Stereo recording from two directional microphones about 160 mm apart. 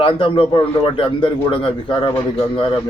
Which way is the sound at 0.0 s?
35° left (ahead or behind).